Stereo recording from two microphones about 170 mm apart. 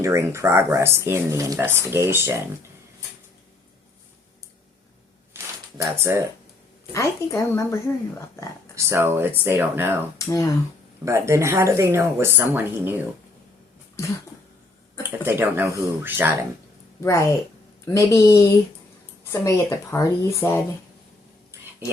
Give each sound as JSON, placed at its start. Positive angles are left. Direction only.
{"t": 0.0, "sound": "speech", "side_deg": -15}
{"t": 5.3, "sound": "a sound", "side_deg": -15}
{"t": 6.9, "sound": "a woman's voice", "side_deg": 15}
{"t": 8.7, "sound": "speech", "side_deg": -15}
{"t": 10.2, "sound": "speech", "side_deg": 20}
{"t": 11.0, "sound": "speech", "side_deg": -15}
{"t": 15.2, "sound": "speech", "side_deg": -10}
{"t": 17.0, "sound": "a woman's voice", "side_deg": 15}